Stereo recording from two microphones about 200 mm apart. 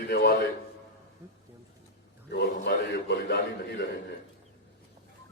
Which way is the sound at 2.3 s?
60° left (ahead or behind).